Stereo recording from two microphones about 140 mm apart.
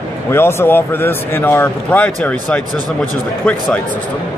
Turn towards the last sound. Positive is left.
turn(degrees=10)  # may be behind; listen again after turning